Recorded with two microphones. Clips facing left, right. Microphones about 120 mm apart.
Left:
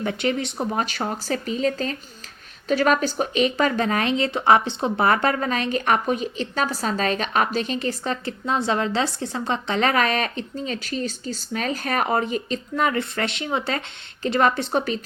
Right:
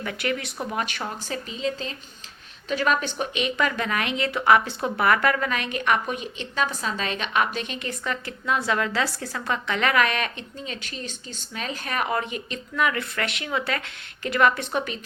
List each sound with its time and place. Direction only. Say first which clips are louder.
0.0 s speech: left 4 dB; 30° left (ahead or behind)